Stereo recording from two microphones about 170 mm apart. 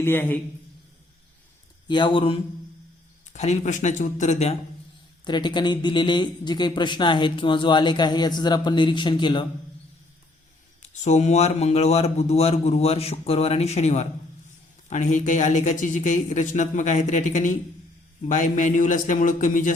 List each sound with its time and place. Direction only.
0.0 s a man's voice: 10° left (ahead or behind)
1.9 s speech: 30° left (ahead or behind)
3.3 s speech: 40° left (ahead or behind)
5.2 s speech: 25° left (ahead or behind)
10.8 s a man's voice: 45° left (ahead or behind)